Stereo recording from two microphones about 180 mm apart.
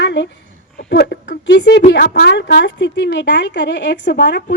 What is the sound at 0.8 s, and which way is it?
A woman's voice, 65° left (ahead or behind).